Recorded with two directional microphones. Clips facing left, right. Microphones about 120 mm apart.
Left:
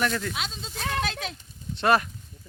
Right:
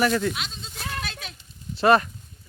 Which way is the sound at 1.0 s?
90° left.